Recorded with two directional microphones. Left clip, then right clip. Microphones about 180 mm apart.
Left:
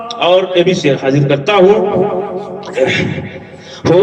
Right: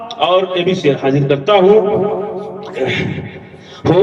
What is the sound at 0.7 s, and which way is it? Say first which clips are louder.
Speech: left 2 dB; 35° left (ahead or behind).